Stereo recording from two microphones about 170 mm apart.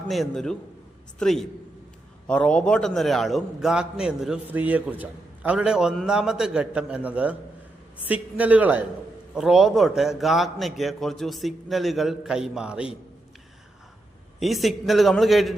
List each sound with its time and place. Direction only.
0.1 s a man's voice: centre (ahead or behind)
14.3 s a man's voice: centre (ahead or behind)